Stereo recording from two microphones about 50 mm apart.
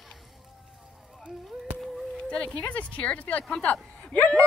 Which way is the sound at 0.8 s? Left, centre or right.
Centre.